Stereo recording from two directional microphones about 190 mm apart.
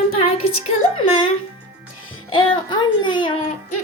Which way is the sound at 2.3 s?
25° left (ahead or behind).